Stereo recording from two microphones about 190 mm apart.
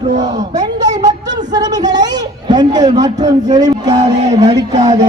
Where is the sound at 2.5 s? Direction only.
20° right (ahead or behind).